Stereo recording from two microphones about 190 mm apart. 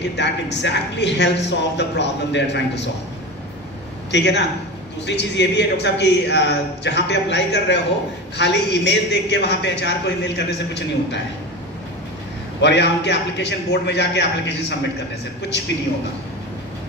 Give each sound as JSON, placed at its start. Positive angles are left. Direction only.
{"t": 0.1, "sound": "a man's voice", "side_deg": 65}
{"t": 4.1, "sound": "a man's voice", "side_deg": 65}
{"t": 12.6, "sound": "a man's voice", "side_deg": 65}